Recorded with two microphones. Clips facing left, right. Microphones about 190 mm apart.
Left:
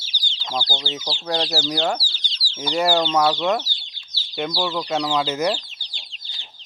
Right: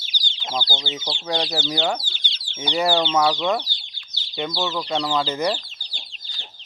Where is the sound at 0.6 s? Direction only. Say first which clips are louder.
Left 1 dB; 20° right (ahead or behind).